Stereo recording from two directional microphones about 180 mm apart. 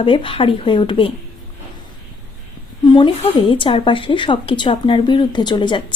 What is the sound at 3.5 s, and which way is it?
Speech, 30° left (ahead or behind).